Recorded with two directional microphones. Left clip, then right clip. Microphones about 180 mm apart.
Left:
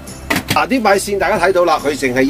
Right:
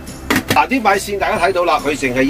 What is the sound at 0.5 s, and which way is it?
Speech, 45° left (ahead or behind).